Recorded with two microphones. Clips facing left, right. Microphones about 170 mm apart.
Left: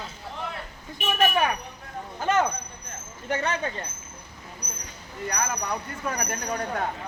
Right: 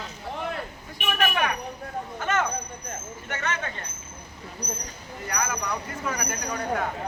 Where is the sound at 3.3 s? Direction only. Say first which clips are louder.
Left 4 dB; 35° left (ahead or behind).